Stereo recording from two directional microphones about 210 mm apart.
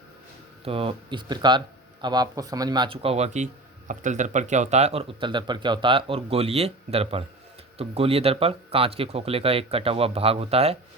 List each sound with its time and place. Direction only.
0.6 s speech: 25° right (ahead or behind)